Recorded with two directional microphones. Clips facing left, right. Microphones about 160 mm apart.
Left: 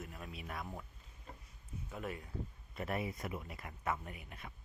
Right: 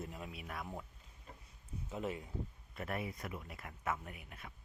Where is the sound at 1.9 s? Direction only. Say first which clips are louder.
Right 3 dB; 20° right (ahead or behind).